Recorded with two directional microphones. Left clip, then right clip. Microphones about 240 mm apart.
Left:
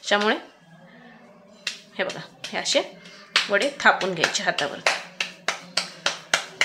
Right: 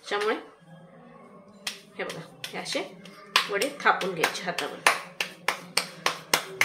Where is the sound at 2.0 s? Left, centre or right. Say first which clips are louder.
Left 7 dB; left.